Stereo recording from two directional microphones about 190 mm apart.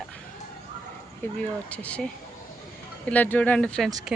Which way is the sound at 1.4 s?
5° left (ahead or behind).